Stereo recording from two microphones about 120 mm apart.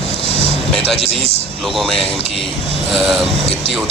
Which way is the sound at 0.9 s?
55° right (ahead or behind).